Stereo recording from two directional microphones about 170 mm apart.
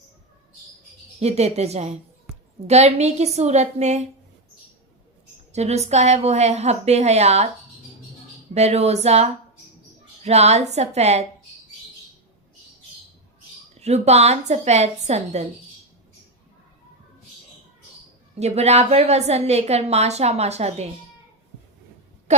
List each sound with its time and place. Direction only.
1.2 s a woman's voice: 40° right (ahead or behind)
5.5 s a woman's voice: 40° right (ahead or behind)
8.5 s a woman's voice: 40° right (ahead or behind)
13.7 s a woman's voice: 40° right (ahead or behind)
18.3 s a woman's voice: 40° right (ahead or behind)
22.3 s a sound: 40° right (ahead or behind)